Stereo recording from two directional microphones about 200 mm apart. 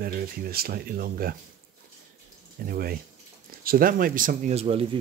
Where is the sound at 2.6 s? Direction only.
50° right (ahead or behind).